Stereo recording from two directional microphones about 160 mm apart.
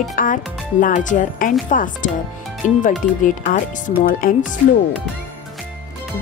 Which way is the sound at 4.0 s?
60° left (ahead or behind).